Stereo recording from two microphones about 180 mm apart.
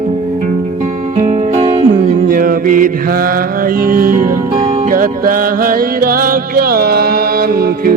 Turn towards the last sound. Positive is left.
turn(degrees=-55)  # may be behind; listen again after turning